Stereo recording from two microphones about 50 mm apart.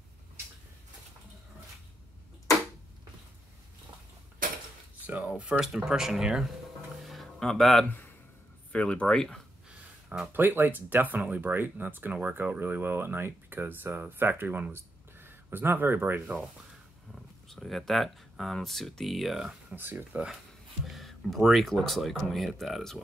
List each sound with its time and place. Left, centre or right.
5.0 s a sound: right
5.6 s speech: centre
7.0 s music: centre
7.3 s speech: centre
8.7 s speech: left
9.0 s speech: centre
9.7 s a sound: right
10.3 s speech: right
12.7 s speech: right
17.5 s speech: centre
19.7 s speech: right
20.8 s speech: centre